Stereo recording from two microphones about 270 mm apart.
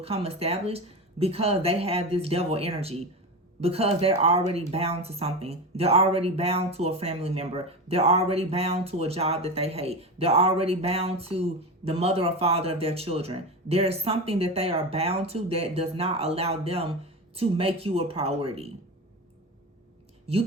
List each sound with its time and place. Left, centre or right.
0.0 s speech: right